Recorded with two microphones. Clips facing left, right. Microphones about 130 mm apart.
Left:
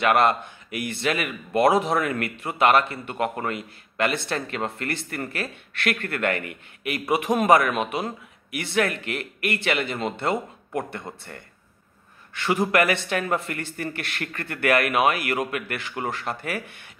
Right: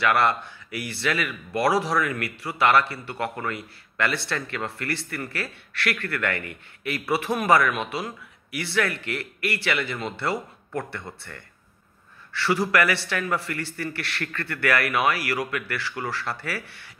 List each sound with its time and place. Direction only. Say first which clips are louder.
0.0 s a man's voice: left 2 dB; 20° left (ahead or behind)
12.3 s a man's voice: even; 20° left (ahead or behind)